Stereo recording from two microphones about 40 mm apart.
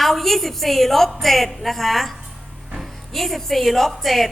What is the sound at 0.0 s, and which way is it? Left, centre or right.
A woman's voice, centre.